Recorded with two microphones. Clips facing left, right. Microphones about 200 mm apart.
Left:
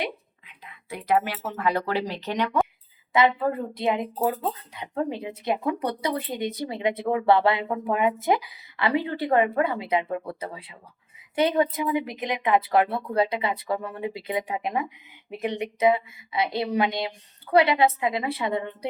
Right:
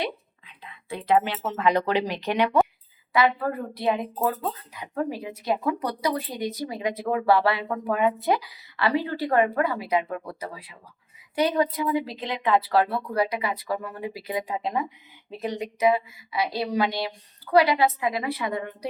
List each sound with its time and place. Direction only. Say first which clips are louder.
0.0 s speech: right 1 dB; 30° right (ahead or behind); by 2.6 s 10° right (ahead or behind)
3.1 s a woman's voice: left 1 dB; 25° left (ahead or behind)